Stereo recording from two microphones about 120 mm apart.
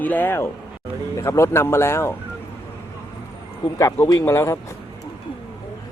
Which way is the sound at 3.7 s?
25° left (ahead or behind).